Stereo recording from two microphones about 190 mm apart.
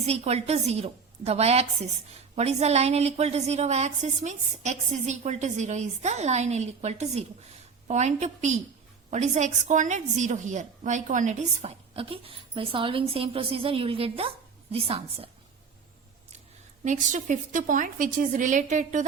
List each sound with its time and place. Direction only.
0.0 s a woman's voice: 35° right (ahead or behind)
16.8 s a woman's voice: 40° right (ahead or behind)